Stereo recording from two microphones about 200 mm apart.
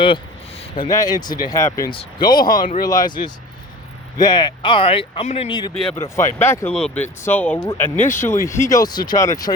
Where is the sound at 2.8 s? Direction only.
20° left (ahead or behind).